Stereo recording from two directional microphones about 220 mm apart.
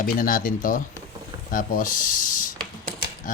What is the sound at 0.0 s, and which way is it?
Speech, 40° left (ahead or behind).